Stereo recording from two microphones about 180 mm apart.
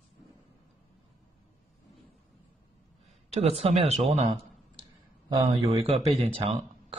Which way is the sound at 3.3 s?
35° right (ahead or behind).